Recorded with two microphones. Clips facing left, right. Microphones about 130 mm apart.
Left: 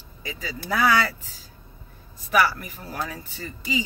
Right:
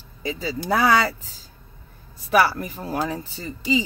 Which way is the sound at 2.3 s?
35° right (ahead or behind).